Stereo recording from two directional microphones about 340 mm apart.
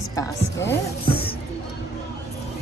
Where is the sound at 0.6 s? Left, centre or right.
Left.